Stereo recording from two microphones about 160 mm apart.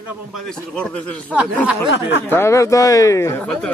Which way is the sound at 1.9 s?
90° left.